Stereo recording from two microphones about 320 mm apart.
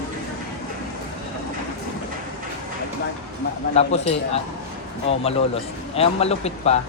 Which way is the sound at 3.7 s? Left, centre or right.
Centre.